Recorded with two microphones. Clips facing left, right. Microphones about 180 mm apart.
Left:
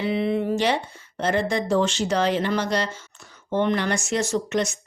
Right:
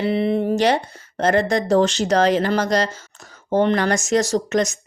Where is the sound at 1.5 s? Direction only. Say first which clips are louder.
Right 5 dB; 40° right (ahead or behind).